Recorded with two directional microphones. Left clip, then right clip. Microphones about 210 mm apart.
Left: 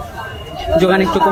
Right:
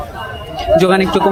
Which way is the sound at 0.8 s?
25° right (ahead or behind).